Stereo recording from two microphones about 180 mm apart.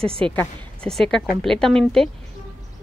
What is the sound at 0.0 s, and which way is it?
Speech, 30° right (ahead or behind).